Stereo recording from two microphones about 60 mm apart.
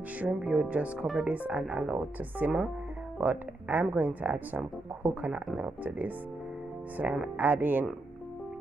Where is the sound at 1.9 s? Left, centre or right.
Right.